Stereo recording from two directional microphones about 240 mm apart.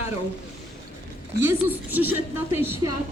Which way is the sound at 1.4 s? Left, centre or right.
Centre.